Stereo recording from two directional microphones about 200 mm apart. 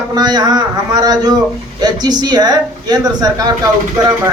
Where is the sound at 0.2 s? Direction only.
20° right (ahead or behind).